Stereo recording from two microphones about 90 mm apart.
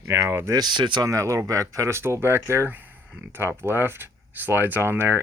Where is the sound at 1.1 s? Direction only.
35° right (ahead or behind).